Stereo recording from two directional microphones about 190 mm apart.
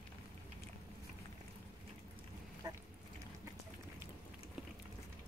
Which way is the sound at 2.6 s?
20° right (ahead or behind).